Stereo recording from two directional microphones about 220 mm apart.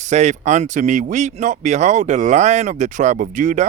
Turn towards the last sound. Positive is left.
turn(degrees=-35)  # may be behind; listen again after turning